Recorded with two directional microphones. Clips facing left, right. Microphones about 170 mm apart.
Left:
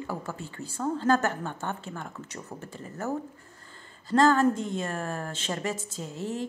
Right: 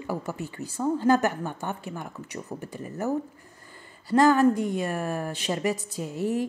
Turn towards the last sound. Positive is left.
turn(degrees=-15)  # may be behind; listen again after turning